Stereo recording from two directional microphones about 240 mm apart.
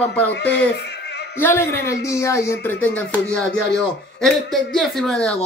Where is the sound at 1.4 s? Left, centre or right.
Centre.